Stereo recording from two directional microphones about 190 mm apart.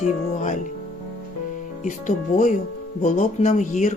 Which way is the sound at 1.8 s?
40° left (ahead or behind).